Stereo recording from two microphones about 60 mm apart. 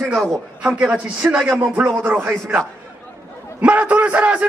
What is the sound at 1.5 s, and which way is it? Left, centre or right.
A man's voice, right.